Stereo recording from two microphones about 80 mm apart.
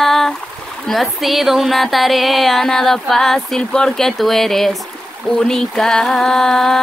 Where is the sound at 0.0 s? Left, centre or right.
Centre.